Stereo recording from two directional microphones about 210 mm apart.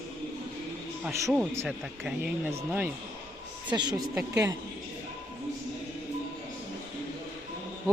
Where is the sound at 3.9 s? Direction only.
Centre (ahead or behind).